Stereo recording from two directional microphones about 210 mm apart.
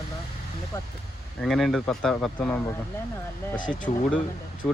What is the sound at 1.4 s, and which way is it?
Speech, centre (ahead or behind).